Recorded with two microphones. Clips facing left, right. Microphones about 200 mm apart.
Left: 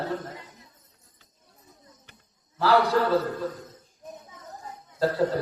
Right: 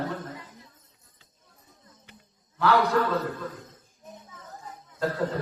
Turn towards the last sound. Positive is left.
turn(degrees=30)  # may be behind; listen again after turning